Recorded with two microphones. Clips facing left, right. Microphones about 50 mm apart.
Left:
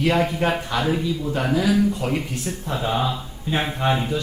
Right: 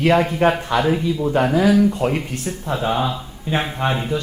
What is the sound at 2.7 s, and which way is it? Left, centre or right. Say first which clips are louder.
Speech: right 3 dB; centre.